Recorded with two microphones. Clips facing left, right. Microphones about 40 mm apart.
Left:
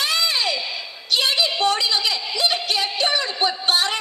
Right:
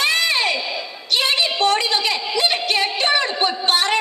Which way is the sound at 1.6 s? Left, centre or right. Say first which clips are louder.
Right 4 dB; right.